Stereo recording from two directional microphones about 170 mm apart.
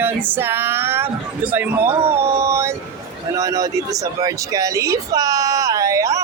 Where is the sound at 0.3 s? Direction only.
10° right (ahead or behind).